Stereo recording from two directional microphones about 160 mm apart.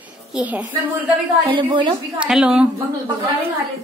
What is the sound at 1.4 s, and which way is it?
Speech, 30° right (ahead or behind).